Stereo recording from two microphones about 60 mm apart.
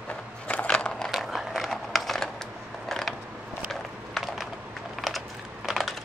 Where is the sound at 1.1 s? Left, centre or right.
Centre.